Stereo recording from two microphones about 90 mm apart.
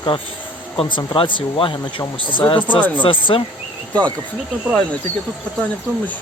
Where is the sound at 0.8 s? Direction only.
70° left (ahead or behind).